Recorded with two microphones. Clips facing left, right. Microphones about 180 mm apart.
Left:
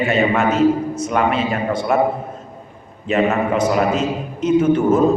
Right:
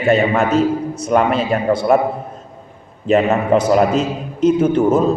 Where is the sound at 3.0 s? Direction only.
35° right (ahead or behind).